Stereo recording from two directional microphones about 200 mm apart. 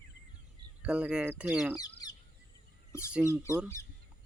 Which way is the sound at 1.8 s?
20° left (ahead or behind).